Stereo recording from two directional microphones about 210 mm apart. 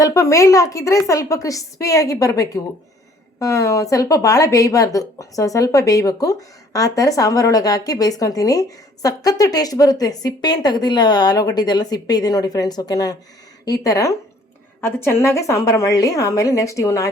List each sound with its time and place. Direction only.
0.0 s a woman's voice: 15° left (ahead or behind)